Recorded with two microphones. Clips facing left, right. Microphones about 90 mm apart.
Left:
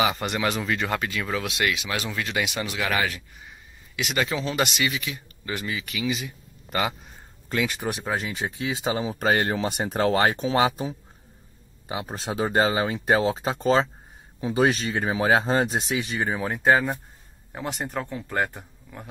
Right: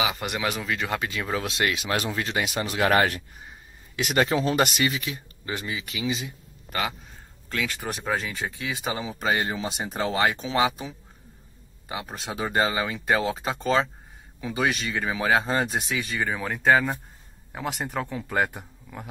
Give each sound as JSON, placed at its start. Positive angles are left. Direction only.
{"t": 0.0, "sound": "speech", "side_deg": -5}
{"t": 0.9, "sound": "speech", "side_deg": -20}
{"t": 1.4, "sound": "speech", "side_deg": -35}
{"t": 6.7, "sound": "a man's voice", "side_deg": 10}
{"t": 7.4, "sound": "speech", "side_deg": 20}
{"t": 8.2, "sound": "speech", "side_deg": 25}
{"t": 9.2, "sound": "speech", "side_deg": 50}